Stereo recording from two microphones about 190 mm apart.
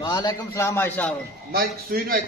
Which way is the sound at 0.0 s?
20° left (ahead or behind).